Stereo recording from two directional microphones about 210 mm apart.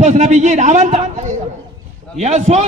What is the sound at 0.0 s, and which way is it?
A man's voice, 35° right (ahead or behind).